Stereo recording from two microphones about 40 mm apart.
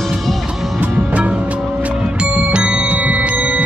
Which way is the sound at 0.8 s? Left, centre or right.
Right.